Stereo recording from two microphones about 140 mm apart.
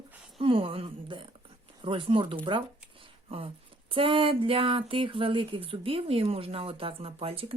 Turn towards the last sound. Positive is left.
turn(degrees=-40)  # may be behind; listen again after turning